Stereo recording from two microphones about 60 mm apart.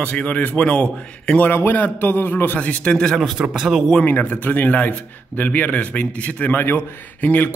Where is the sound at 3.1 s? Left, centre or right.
Centre.